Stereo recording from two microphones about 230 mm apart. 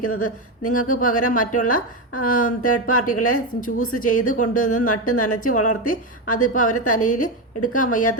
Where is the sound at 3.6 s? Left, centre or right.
Left.